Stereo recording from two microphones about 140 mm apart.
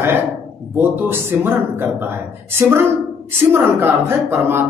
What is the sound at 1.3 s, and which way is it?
Speech, 10° right (ahead or behind).